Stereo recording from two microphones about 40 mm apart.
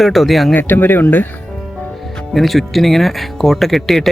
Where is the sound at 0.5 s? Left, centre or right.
Left.